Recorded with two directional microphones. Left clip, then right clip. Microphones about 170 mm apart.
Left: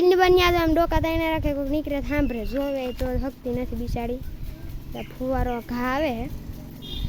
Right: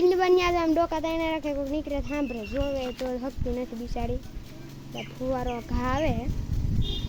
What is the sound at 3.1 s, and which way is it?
Speech, 30° left (ahead or behind).